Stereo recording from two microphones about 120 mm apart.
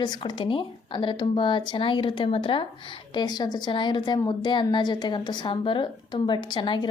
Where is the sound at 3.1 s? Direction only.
35° left (ahead or behind).